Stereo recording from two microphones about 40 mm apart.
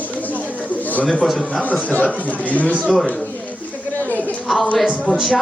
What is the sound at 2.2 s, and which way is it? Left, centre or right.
Speech, left.